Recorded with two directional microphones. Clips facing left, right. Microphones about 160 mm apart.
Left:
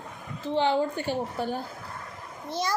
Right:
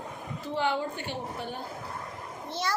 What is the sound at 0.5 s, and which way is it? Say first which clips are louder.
A woman's voice: left 5 dB; 30° left (ahead or behind).